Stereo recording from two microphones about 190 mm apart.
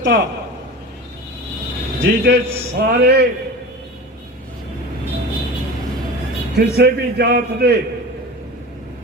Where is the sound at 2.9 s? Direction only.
60° right (ahead or behind).